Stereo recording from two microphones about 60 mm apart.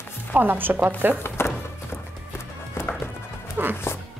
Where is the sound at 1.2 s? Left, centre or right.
Left.